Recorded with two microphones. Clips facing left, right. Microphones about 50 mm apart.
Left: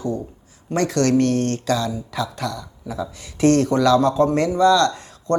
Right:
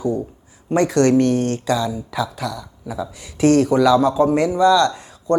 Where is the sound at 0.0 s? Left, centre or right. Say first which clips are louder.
Right 4 dB; centre.